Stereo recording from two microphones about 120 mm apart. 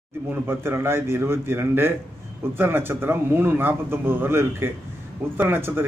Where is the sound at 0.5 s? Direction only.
20° right (ahead or behind).